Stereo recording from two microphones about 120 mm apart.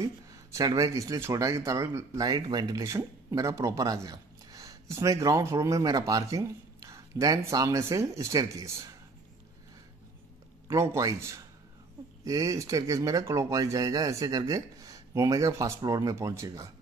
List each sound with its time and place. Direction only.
0.0 s speech: 30° right (ahead or behind)
10.7 s speech: 25° right (ahead or behind)